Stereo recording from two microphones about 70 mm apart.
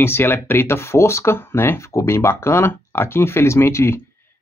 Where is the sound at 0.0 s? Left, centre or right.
Left.